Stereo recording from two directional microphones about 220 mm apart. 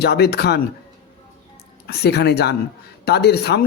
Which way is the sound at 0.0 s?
45° left (ahead or behind).